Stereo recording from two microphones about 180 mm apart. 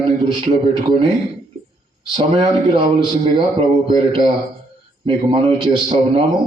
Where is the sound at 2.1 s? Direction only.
25° right (ahead or behind).